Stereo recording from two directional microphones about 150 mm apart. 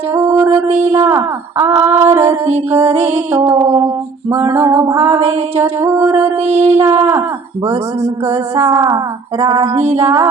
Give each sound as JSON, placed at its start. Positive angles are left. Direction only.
{"t": 0.1, "sound": "music", "side_deg": -15}
{"t": 0.7, "sound": "a sound", "side_deg": -45}
{"t": 0.9, "sound": "speech", "side_deg": -15}
{"t": 3.5, "sound": "a woman's voice", "side_deg": -25}
{"t": 8.0, "sound": "music", "side_deg": -45}
{"t": 8.6, "sound": "a woman's voice", "side_deg": -20}
{"t": 9.7, "sound": "music", "side_deg": -45}